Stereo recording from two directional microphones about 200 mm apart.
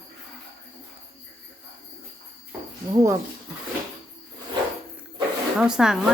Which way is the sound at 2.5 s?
15° right (ahead or behind).